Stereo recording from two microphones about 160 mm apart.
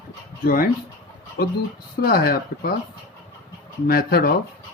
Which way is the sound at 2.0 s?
70° left (ahead or behind).